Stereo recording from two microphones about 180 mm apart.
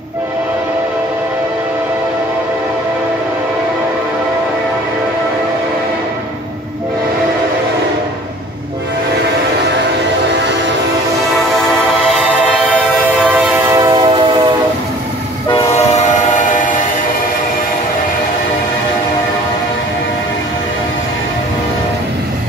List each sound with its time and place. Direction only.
12.1 s music: 5° left (ahead or behind)
13.2 s train: 10° right (ahead or behind)
13.7 s train: 25° right (ahead or behind)
15.6 s train: 40° left (ahead or behind)